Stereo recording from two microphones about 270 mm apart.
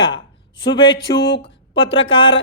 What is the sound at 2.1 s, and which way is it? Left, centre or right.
Speech, centre.